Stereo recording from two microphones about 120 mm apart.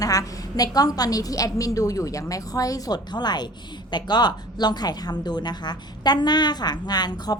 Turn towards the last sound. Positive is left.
turn(degrees=35)  # may be behind; listen again after turning